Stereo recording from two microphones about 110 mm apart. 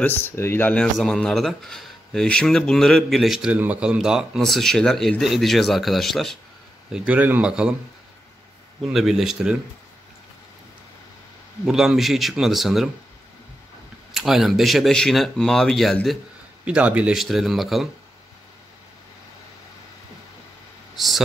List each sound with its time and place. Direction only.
0.0 s speech: 20° left (ahead or behind)
0.9 s speech: 5° left (ahead or behind)
3.5 s speech: 15° right (ahead or behind); by 6.3 s centre (ahead or behind)
6.9 s speech: 15° right (ahead or behind)
8.8 s speech: centre (ahead or behind)
11.6 s speech: 5° right (ahead or behind)
14.1 s speech: centre (ahead or behind)
16.6 s speech: 10° right (ahead or behind)
20.9 s a sound: centre (ahead or behind)